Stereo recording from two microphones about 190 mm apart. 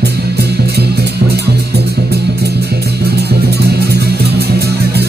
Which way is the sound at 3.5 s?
60° right (ahead or behind).